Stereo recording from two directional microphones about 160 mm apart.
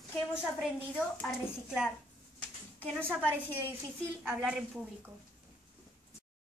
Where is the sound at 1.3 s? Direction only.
5° right (ahead or behind).